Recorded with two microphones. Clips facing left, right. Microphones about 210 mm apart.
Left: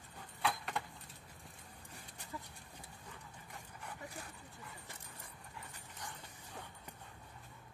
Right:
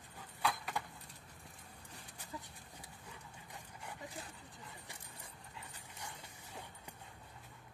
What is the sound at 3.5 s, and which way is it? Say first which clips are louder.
Dog: even; 20° right (ahead or behind).